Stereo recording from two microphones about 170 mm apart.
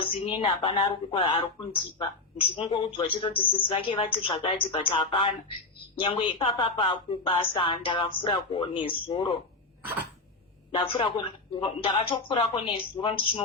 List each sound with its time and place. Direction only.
0.0 s speech: 35° left (ahead or behind)
10.7 s speech: 30° left (ahead or behind)